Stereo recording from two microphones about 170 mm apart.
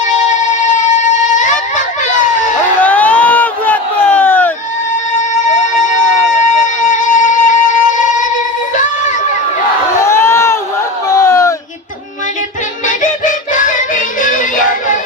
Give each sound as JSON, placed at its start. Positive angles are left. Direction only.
{"t": 0.0, "sound": "a sound", "side_deg": 45}
{"t": 2.8, "sound": "crowd", "side_deg": 10}
{"t": 6.8, "sound": "music", "side_deg": 50}
{"t": 10.0, "sound": "crowd", "side_deg": 15}
{"t": 11.2, "sound": "a sound", "side_deg": 20}
{"t": 12.8, "sound": "music", "side_deg": 50}